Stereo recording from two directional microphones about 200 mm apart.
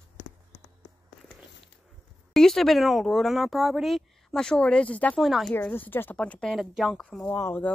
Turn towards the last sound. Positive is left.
turn(degrees=10)  # may be behind; listen again after turning